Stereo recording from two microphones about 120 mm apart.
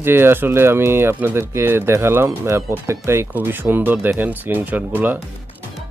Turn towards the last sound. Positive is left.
turn(degrees=-15)  # may be behind; listen again after turning